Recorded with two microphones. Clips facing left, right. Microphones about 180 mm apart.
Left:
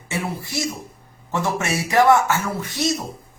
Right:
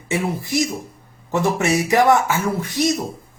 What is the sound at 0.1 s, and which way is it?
Speech, 20° right (ahead or behind).